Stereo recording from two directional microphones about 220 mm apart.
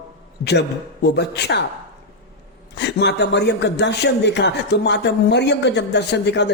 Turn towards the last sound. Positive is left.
turn(degrees=50)  # may be behind; listen again after turning